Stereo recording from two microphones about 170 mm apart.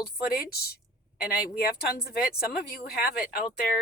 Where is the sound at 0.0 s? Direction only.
65° left (ahead or behind).